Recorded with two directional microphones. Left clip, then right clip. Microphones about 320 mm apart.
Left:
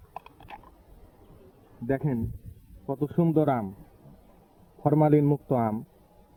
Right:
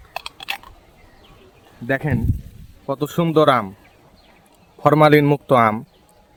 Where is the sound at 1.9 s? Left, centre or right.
Centre.